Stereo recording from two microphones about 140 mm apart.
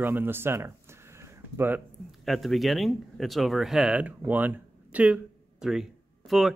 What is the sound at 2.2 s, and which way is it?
Speech, centre (ahead or behind).